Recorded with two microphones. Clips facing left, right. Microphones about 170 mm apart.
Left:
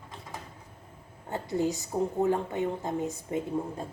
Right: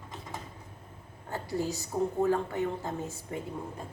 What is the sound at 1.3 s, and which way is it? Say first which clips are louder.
A woman's voice: left 4 dB; 20° left (ahead or behind).